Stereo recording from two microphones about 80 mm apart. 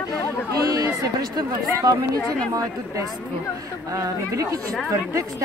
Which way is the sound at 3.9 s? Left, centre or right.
Right.